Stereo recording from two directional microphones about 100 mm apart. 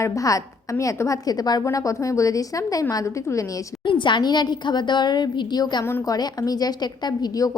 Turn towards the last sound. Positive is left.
turn(degrees=40)  # may be behind; listen again after turning